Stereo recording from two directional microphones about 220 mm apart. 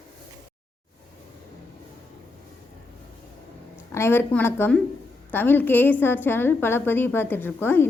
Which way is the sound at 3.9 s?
10° left (ahead or behind).